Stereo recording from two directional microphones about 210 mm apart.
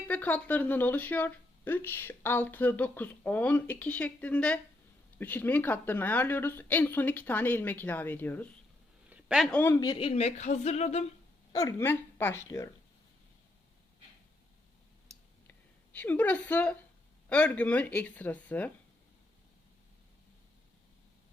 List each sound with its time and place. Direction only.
0.1 s speech: 5° left (ahead or behind)
9.0 s speech: 5° right (ahead or behind)
9.9 s speech: 25° left (ahead or behind)
11.5 s speech: 15° left (ahead or behind)
15.4 s a sound: 10° left (ahead or behind)
17.2 s speech: 5° left (ahead or behind)